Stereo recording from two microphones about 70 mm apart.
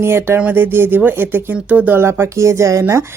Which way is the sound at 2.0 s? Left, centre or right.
Right.